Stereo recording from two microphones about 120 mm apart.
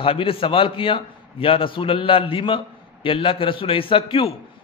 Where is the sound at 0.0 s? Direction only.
50° left (ahead or behind).